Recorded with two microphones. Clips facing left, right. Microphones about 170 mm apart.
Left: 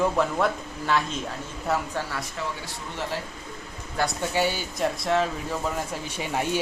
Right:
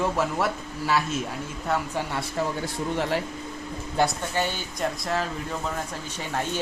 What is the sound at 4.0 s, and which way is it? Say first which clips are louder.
Speech: right 4 dB; 25° right (ahead or behind).